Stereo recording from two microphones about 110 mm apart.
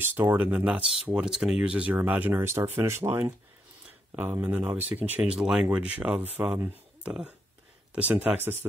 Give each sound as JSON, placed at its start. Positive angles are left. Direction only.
{"t": 0.0, "sound": "speech", "side_deg": -20}